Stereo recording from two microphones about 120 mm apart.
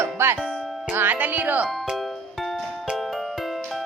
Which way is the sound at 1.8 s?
Centre (ahead or behind).